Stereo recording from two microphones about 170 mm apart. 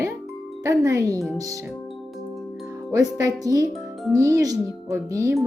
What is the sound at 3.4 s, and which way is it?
Speech, 20° right (ahead or behind).